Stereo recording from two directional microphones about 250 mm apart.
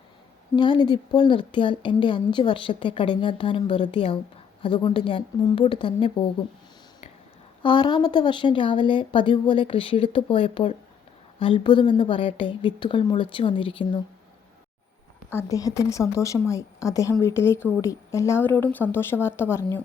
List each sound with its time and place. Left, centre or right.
0.5 s a woman's voice: centre
7.6 s a woman's voice: centre
15.3 s speech: centre